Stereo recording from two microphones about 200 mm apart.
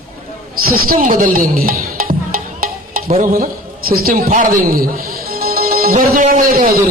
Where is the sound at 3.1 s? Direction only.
40° right (ahead or behind).